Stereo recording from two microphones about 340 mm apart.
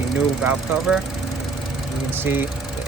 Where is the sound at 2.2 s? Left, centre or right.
Centre.